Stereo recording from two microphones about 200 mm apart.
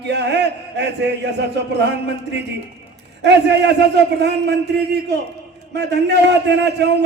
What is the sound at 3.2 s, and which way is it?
A man's voice, 60° right (ahead or behind).